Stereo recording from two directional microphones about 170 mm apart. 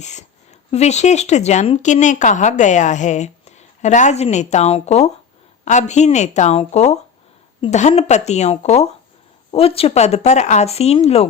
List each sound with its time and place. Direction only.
0.0 s speech: 45° left (ahead or behind)